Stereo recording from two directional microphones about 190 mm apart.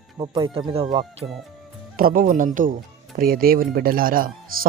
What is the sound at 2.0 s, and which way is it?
Speech, 50° right (ahead or behind).